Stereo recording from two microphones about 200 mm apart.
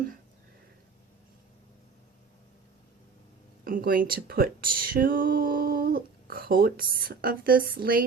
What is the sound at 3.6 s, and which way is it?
Speech, 45° right (ahead or behind).